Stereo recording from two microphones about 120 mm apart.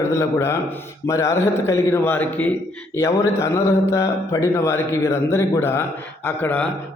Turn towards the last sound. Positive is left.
turn(degrees=15)  # may be behind; listen again after turning